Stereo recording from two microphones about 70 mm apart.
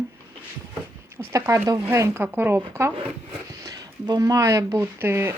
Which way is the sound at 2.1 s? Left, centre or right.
Right.